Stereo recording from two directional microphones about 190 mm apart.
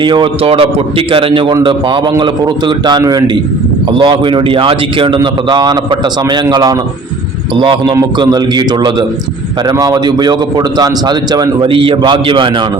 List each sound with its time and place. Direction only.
0.0 s a man's voice: 25° right (ahead or behind)